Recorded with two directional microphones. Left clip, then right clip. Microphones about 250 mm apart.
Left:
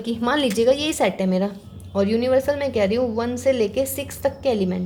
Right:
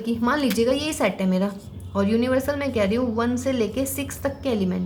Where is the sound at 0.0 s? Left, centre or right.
Left.